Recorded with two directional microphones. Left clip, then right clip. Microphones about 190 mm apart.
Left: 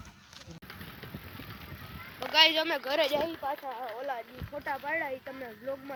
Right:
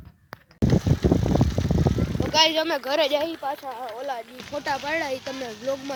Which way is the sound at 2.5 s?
50° right (ahead or behind).